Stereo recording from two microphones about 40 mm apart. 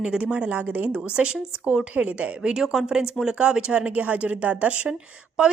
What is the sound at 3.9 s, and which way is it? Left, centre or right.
Speech, right.